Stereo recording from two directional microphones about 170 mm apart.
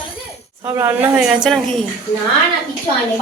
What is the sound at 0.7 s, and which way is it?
Speech, 15° right (ahead or behind).